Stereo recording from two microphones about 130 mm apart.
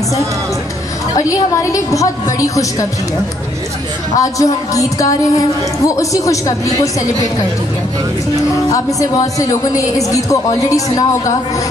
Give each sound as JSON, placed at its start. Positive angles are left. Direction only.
{"t": 1.3, "sound": "a woman's voice", "side_deg": 25}
{"t": 4.2, "sound": "a woman's voice", "side_deg": 25}
{"t": 8.6, "sound": "a woman's voice", "side_deg": 25}